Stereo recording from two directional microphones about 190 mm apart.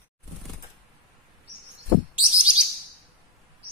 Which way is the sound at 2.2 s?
5° right (ahead or behind).